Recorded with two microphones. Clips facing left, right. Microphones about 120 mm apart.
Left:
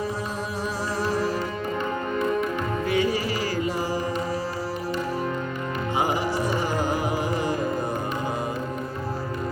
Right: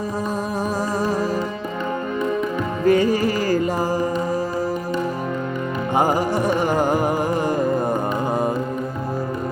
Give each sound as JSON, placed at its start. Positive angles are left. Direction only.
{"t": 2.8, "sound": "music", "side_deg": -45}
{"t": 5.9, "sound": "music", "side_deg": -45}